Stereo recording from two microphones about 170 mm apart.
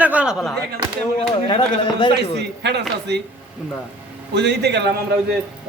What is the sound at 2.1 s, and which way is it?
Speech, 80° right.